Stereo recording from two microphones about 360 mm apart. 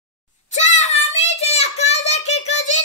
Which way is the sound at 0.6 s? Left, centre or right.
Centre.